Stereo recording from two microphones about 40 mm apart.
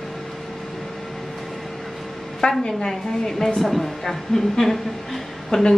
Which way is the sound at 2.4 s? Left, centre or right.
Left.